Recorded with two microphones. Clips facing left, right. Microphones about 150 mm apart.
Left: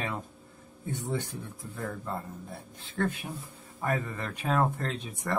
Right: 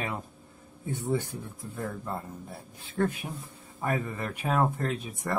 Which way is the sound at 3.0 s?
20° right (ahead or behind).